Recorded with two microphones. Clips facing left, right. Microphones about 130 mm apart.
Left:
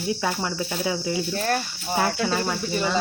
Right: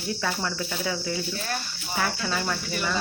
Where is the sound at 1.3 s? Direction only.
50° left (ahead or behind).